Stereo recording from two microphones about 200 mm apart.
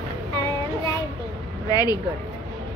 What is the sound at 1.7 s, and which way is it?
Speech, 20° left (ahead or behind).